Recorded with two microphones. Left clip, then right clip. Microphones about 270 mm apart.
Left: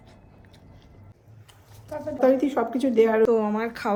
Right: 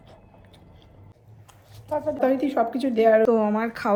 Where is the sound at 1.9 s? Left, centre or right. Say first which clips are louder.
Right 7 dB; centre.